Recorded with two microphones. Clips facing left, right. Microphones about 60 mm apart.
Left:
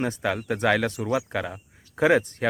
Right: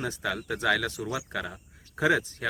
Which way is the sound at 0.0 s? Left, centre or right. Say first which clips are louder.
Left 5 dB; left.